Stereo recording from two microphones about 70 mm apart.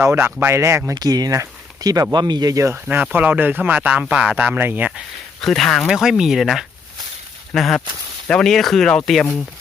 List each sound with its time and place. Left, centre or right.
0.0 s speech: right
0.9 s speech: right
1.3 s speech: right
2.1 s speech: right
2.7 s speech: right
4.5 s speech: right
5.4 s speech: centre
5.9 s speech: centre